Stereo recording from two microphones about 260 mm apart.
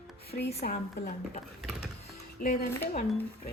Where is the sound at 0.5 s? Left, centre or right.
Left.